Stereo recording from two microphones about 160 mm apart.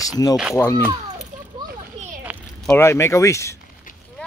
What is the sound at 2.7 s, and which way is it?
Speech, 15° left (ahead or behind).